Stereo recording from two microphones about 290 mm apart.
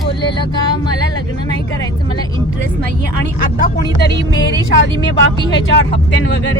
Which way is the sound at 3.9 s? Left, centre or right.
Left.